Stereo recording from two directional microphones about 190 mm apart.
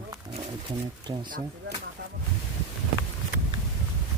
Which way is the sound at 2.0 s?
60° right (ahead or behind).